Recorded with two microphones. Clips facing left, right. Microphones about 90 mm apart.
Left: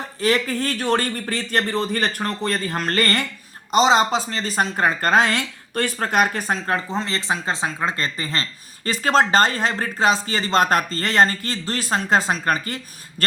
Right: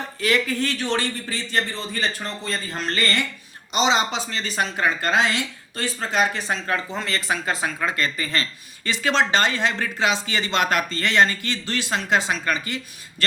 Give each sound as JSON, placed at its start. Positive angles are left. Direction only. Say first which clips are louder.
{"t": 0.2, "sound": "a man's voice", "louder": "left 2 dB", "side_deg": 35}